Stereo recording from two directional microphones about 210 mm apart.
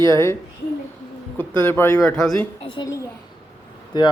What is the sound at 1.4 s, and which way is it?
Speech, 10° left (ahead or behind).